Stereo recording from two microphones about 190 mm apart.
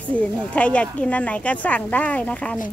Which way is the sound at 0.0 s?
5° left (ahead or behind).